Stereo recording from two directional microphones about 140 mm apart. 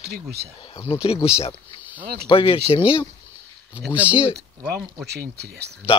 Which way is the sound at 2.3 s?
40° left (ahead or behind).